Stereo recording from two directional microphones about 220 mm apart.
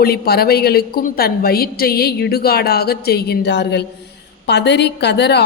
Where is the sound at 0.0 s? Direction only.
45° left (ahead or behind).